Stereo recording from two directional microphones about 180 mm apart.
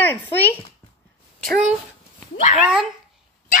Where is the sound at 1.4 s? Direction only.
Centre (ahead or behind).